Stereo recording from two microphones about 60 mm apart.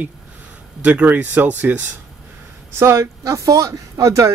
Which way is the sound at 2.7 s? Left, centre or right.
Right.